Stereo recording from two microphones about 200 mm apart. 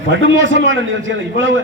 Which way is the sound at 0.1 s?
70° right (ahead or behind).